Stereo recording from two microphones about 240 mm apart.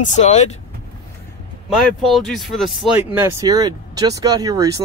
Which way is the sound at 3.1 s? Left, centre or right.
Centre.